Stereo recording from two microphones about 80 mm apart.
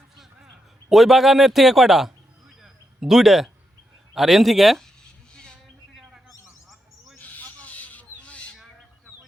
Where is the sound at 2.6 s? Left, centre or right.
Centre.